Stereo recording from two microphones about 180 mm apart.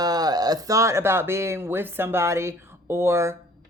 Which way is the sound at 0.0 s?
20° right (ahead or behind).